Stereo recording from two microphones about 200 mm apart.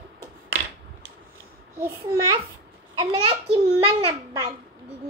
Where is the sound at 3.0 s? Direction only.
25° right (ahead or behind).